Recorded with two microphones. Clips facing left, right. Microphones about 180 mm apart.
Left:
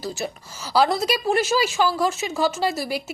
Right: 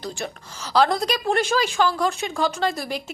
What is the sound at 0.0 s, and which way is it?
A woman's voice, 5° left (ahead or behind).